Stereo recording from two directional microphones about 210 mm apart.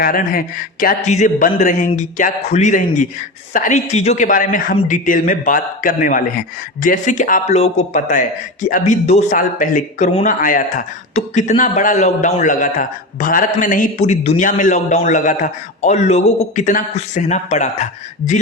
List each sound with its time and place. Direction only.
0.0 s speech: 45° left (ahead or behind)